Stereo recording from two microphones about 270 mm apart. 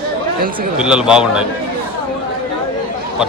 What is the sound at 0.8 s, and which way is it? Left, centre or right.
Speech, centre.